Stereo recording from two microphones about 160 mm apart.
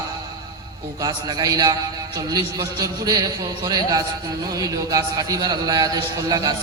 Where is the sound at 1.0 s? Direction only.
25° right (ahead or behind).